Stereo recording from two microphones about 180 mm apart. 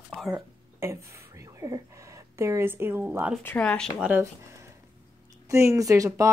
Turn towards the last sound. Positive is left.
turn(degrees=-20)  # may be behind; listen again after turning